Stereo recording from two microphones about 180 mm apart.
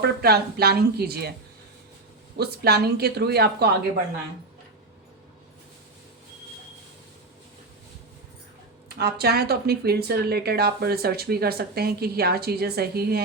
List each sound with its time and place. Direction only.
0.0 s speech: 60° right (ahead or behind)
2.4 s speech: 60° right (ahead or behind)
9.0 s speech: 60° right (ahead or behind)